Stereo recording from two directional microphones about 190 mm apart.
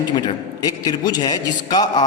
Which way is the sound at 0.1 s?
25° left (ahead or behind).